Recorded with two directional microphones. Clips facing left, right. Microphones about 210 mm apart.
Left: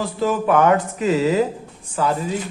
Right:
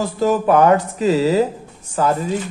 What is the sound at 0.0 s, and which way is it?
Speech, 40° right (ahead or behind).